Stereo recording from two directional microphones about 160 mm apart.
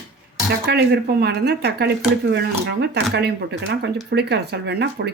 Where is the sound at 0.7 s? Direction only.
85° right.